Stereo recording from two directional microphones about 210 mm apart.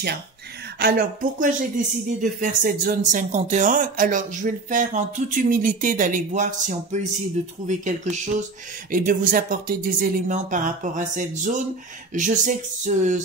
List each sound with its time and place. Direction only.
0.7 s speech: 45° right (ahead or behind)